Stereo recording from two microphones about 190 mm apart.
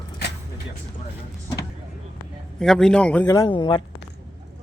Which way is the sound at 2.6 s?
5° left (ahead or behind).